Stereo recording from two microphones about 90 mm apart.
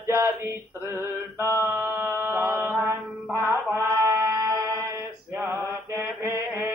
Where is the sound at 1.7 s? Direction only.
20° right (ahead or behind).